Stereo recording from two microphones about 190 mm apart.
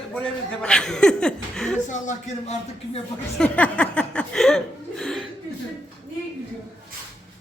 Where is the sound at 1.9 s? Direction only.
40° left (ahead or behind).